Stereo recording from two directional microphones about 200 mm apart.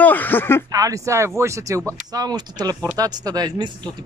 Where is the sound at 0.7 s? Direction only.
15° right (ahead or behind).